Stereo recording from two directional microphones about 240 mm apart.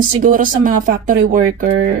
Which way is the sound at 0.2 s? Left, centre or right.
Right.